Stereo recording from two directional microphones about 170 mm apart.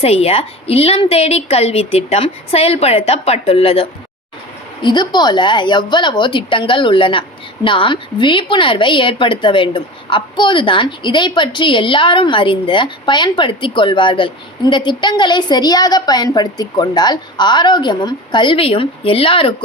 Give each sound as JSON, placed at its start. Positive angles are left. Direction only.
{"t": 0.0, "sound": "a woman's voice", "side_deg": 35}